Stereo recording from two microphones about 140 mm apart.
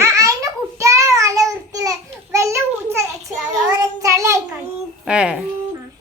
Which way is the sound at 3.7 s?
20° right (ahead or behind).